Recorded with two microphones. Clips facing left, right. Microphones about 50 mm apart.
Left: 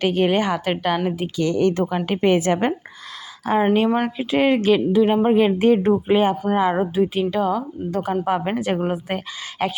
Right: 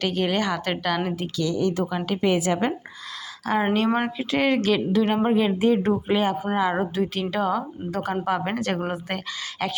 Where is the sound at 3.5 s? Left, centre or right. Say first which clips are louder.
Left 4 dB; left.